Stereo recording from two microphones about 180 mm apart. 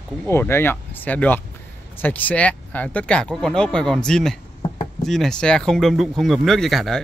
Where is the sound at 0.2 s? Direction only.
15° left (ahead or behind).